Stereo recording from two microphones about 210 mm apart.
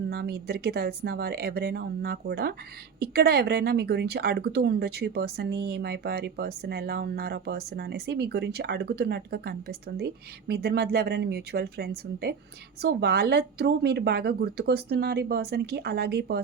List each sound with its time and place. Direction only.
0.1 s a woman's voice: 50° right (ahead or behind)